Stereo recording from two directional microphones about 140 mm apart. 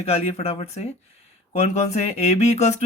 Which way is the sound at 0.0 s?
50° left (ahead or behind).